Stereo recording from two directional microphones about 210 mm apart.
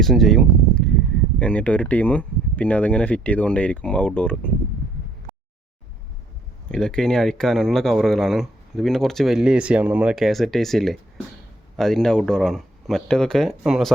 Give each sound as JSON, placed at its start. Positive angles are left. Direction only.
{"t": 0.0, "sound": "speech", "side_deg": 0}
{"t": 6.7, "sound": "speech", "side_deg": 5}